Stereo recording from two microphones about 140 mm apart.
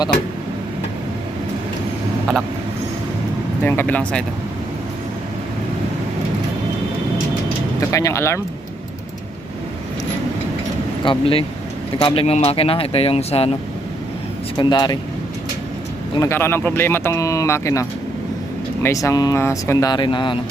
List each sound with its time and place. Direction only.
3.6 s speech: 15° left (ahead or behind)
7.8 s speech: 20° left (ahead or behind)
11.0 s speech: 40° left (ahead or behind)
14.6 s speech: 30° left (ahead or behind)
16.3 s speech: 15° left (ahead or behind); by 20.4 s 35° left (ahead or behind)